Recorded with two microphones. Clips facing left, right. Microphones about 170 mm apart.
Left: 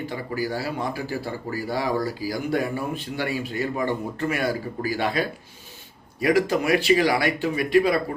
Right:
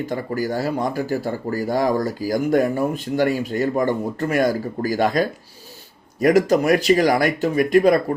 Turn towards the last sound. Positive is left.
turn(degrees=-45)  # may be behind; listen again after turning